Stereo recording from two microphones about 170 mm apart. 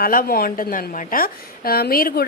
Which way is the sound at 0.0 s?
55° left (ahead or behind).